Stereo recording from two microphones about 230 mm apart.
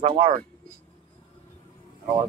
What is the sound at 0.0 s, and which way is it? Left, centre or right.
Speech, right.